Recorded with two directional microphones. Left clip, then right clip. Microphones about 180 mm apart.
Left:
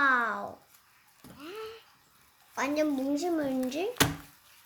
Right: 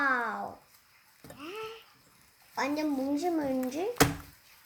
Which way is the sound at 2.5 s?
45° left (ahead or behind).